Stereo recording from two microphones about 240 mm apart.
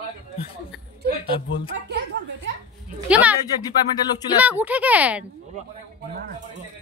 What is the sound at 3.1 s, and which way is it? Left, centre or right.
Speech, centre.